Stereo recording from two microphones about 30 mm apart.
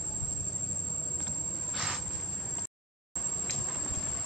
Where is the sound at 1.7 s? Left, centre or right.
Centre.